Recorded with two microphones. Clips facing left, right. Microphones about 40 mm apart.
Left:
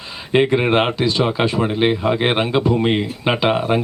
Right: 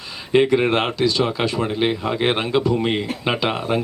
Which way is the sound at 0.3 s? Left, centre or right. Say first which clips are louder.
Left 1 dB; centre.